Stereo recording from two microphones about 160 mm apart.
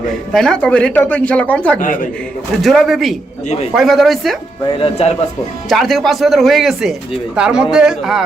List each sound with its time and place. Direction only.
0.3 s speech: 5° left (ahead or behind)
1.8 s a man's voice: 55° left (ahead or behind)
2.6 s speech: centre (ahead or behind)
4.7 s speech: 35° left (ahead or behind)
5.6 s speech: centre (ahead or behind)